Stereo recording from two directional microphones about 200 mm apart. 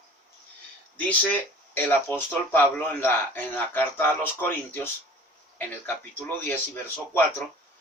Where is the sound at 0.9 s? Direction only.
5° left (ahead or behind).